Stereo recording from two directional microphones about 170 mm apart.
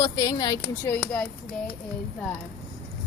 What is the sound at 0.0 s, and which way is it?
Speech, 20° left (ahead or behind).